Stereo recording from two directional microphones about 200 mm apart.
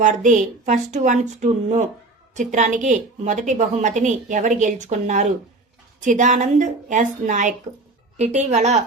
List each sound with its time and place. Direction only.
0.0 s a woman's voice: 40° right (ahead or behind)